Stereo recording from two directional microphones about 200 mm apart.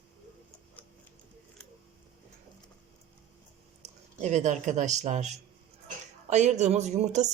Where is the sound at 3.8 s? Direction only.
35° right (ahead or behind).